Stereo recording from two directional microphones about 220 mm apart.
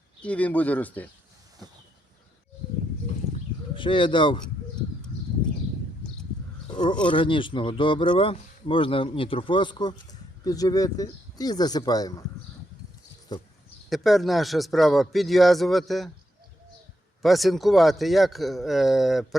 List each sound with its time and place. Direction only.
0.2 s speech: 5° left (ahead or behind)
3.8 s speech: 20° left (ahead or behind)
7.0 s speech: 20° left (ahead or behind)
13.3 s speech: 20° left (ahead or behind)
13.9 s speech: centre (ahead or behind)
17.2 s speech: centre (ahead or behind)